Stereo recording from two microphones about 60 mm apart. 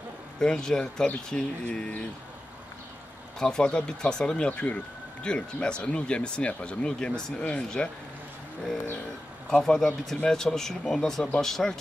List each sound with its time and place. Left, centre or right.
0.4 s speech: centre
3.3 s speech: centre
9.7 s speech: centre